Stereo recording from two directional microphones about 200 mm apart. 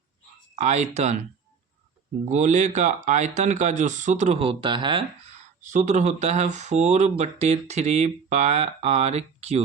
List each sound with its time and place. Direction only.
0.5 s speech: 35° right (ahead or behind)
2.3 s speech: 35° right (ahead or behind)
5.6 s speech: 35° right (ahead or behind)